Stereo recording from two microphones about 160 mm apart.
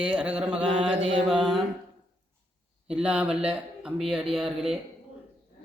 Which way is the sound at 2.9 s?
5° right (ahead or behind).